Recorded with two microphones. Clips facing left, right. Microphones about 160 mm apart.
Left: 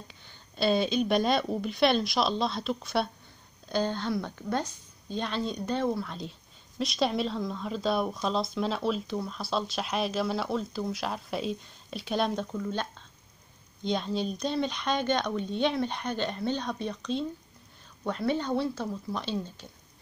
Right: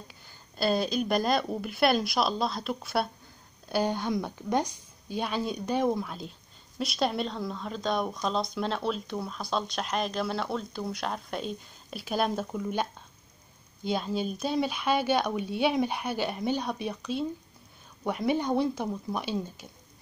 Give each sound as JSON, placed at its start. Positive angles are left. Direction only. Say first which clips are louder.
{"t": 0.1, "sound": "a woman's voice", "louder": "even", "side_deg": -5}
{"t": 6.0, "sound": "a woman's voice", "louder": "left 1 dB", "side_deg": 0}